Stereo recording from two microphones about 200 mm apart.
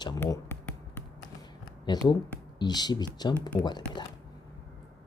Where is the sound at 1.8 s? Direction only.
20° left (ahead or behind).